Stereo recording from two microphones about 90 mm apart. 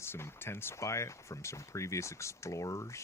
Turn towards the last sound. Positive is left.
turn(degrees=35)  # may be behind; listen again after turning